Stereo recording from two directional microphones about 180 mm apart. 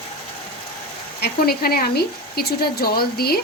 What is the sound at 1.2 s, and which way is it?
Speech, 60° left (ahead or behind).